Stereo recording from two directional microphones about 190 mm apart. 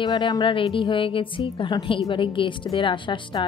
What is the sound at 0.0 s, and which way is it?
A woman's voice, 20° left (ahead or behind).